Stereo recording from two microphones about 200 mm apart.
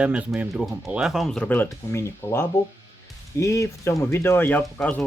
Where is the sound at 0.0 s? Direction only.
5° right (ahead or behind); by 2.4 s 15° left (ahead or behind).